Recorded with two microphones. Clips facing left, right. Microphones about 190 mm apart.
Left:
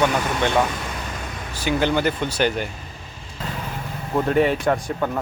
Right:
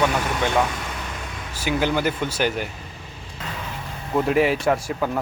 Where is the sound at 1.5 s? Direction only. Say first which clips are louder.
Left 2 dB; 5° right (ahead or behind).